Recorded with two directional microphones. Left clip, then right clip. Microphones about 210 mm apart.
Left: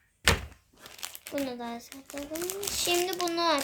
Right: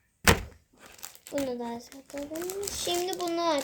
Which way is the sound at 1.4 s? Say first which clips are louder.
Right 3 dB; 40° left (ahead or behind).